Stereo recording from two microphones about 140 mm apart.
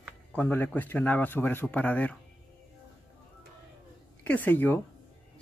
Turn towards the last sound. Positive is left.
turn(degrees=15)  # may be behind; listen again after turning